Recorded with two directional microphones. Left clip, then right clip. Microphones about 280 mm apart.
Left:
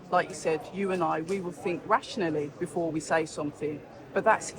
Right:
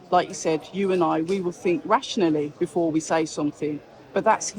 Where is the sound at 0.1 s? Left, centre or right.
Right.